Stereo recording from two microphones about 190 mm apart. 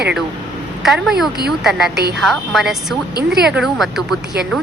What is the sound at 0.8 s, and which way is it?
Speech, centre (ahead or behind).